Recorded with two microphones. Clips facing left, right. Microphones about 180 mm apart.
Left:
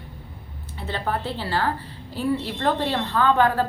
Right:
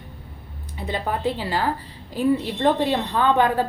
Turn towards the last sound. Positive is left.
turn(degrees=-15)  # may be behind; listen again after turning